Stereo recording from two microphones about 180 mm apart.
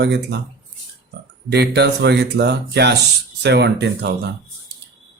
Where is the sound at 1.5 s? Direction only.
70° right (ahead or behind).